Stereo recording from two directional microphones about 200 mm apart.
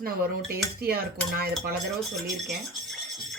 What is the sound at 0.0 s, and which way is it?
Speech, 50° right (ahead or behind).